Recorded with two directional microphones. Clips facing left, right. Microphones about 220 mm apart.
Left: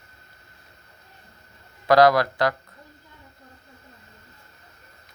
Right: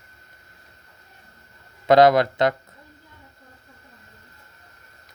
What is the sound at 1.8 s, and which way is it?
Speech, 25° right (ahead or behind).